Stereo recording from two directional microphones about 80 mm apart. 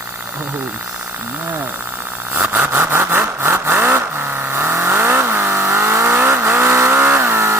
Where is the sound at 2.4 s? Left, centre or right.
Right.